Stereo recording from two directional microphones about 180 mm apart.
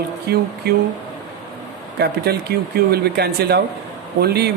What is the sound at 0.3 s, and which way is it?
Speech, 65° right (ahead or behind).